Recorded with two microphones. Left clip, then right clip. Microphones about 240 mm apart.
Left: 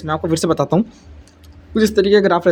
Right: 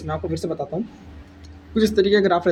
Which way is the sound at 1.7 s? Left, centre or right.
Left.